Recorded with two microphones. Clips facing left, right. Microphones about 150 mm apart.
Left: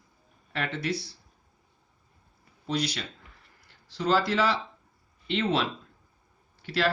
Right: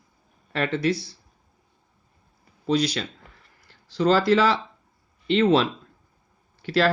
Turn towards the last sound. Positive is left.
turn(degrees=-90)